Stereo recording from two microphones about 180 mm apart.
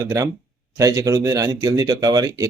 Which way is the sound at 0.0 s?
15° right (ahead or behind).